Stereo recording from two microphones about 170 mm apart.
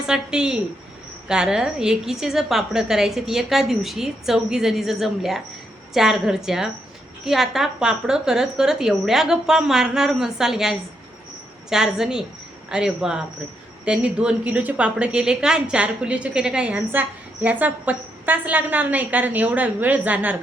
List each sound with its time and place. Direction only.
0.0 s a woman's voice: 5° right (ahead or behind)